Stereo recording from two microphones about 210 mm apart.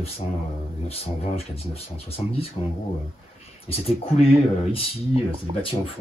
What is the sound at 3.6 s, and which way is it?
Speech, 30° left (ahead or behind).